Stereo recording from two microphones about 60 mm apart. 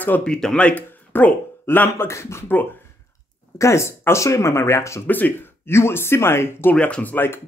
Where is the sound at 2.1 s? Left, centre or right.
Left.